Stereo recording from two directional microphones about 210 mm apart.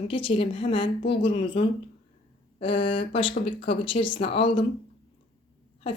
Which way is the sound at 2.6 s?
25° left (ahead or behind).